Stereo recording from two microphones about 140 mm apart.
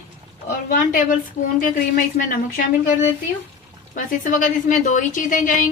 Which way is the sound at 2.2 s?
70° left (ahead or behind).